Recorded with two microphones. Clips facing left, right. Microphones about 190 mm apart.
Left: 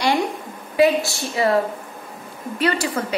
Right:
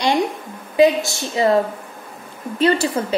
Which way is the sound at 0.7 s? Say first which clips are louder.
Right 2 dB; 20° right (ahead or behind).